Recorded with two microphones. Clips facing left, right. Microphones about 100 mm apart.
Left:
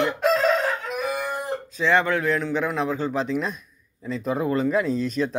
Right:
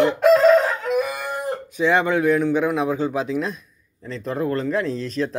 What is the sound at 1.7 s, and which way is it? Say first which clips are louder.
A man's voice: right 2 dB; 15° right (ahead or behind).